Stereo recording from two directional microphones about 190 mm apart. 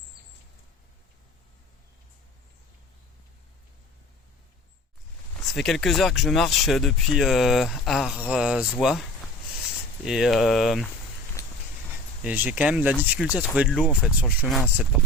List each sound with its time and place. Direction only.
5.5 s speech: centre (ahead or behind)
11.4 s vehicle: 15° left (ahead or behind)
12.2 s speech: 10° right (ahead or behind)